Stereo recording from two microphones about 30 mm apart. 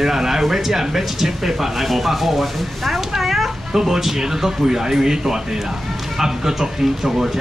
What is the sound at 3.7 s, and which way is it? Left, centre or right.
Speech, centre.